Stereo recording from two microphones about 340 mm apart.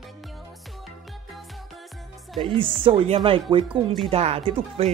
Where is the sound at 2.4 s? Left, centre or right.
Centre.